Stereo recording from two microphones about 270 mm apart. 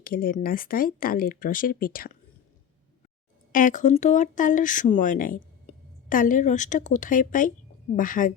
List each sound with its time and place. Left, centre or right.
0.0 s speech: left
3.5 s a woman's voice: left